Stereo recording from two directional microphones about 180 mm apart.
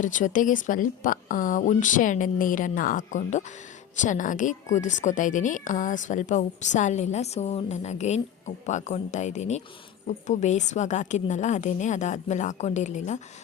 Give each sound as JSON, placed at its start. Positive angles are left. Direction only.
{"t": 0.0, "sound": "a woman's voice", "side_deg": 45}